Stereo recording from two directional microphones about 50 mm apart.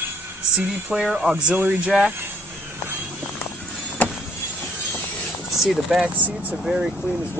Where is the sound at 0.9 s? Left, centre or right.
Centre.